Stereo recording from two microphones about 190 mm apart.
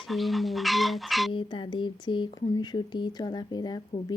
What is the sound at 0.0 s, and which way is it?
Speech, centre (ahead or behind).